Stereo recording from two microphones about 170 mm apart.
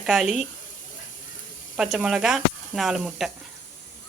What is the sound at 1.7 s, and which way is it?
Speech, 5° right (ahead or behind).